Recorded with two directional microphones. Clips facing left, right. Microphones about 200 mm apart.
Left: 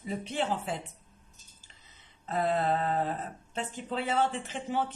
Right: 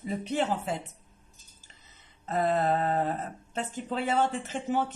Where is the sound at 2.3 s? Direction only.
45° right (ahead or behind).